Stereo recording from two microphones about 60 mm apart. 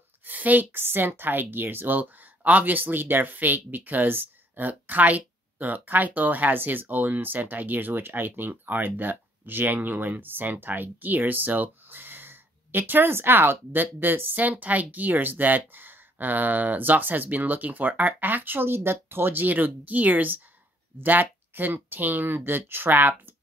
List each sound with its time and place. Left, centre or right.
0.2 s speech: right